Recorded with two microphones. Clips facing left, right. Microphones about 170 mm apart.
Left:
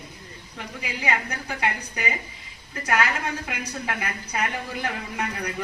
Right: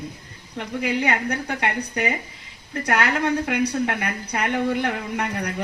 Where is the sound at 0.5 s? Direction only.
65° right (ahead or behind).